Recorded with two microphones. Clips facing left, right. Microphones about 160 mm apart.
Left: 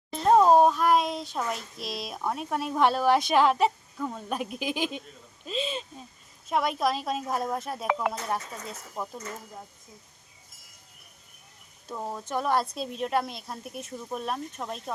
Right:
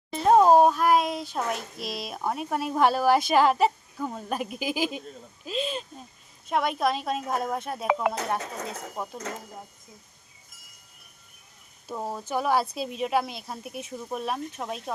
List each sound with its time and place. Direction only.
0.2 s speech: 5° right (ahead or behind)
8.4 s speech: 80° right
11.9 s speech: 5° right (ahead or behind)